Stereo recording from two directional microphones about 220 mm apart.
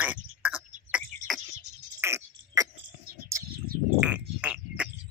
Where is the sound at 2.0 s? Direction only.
15° right (ahead or behind).